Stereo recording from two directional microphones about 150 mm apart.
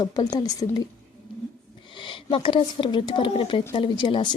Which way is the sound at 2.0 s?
35° left (ahead or behind).